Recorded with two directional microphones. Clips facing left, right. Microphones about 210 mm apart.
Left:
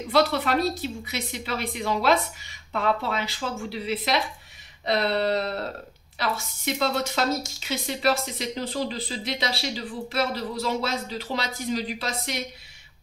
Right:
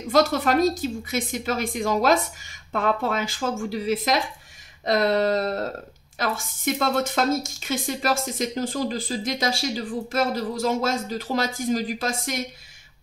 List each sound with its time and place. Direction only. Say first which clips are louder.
0.1 s a woman's voice: right 2 dB; 45° right (ahead or behind)